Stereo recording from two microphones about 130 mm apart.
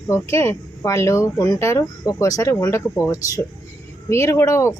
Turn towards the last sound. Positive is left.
turn(degrees=20)  # may be behind; listen again after turning